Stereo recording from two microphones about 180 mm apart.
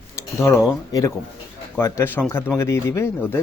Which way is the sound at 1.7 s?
15° left (ahead or behind).